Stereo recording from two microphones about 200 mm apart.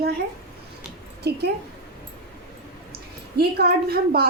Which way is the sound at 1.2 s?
55° right (ahead or behind).